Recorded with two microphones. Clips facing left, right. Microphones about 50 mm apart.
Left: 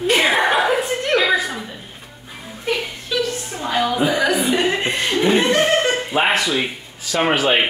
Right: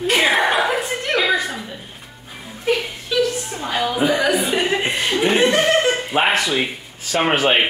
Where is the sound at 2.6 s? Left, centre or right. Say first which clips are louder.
Right 2 dB; centre.